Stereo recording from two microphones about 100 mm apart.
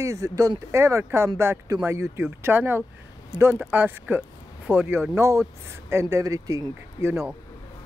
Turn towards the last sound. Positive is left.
turn(degrees=-30)  # may be behind; listen again after turning